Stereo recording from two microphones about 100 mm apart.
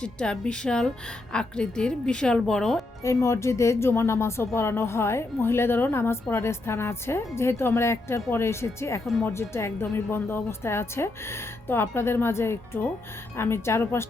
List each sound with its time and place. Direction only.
0.0 s speech: 10° left (ahead or behind)
3.0 s a woman's voice: 30° left (ahead or behind)